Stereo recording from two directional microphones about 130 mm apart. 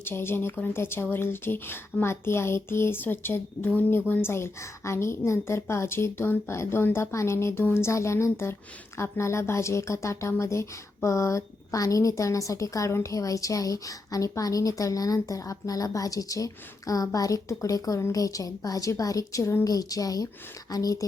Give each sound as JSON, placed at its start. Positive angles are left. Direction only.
{"t": 0.0, "sound": "a woman's voice", "side_deg": 15}